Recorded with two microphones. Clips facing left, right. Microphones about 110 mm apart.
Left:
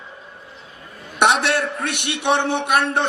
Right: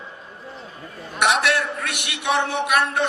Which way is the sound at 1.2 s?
25° left (ahead or behind).